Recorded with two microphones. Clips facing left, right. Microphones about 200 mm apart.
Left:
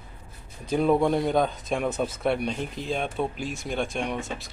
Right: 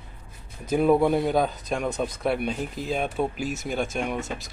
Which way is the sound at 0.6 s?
5° right (ahead or behind).